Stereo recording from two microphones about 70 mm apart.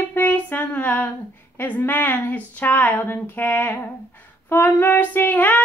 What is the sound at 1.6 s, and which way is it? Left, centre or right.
Female singing, left.